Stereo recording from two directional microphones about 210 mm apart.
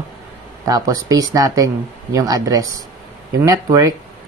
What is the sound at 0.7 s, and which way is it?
Speech, 15° right (ahead or behind).